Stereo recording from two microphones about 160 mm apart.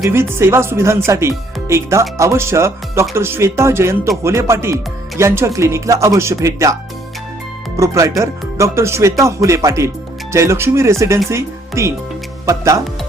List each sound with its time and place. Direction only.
0.0 s speech: 15° right (ahead or behind)
7.8 s speech: 20° right (ahead or behind)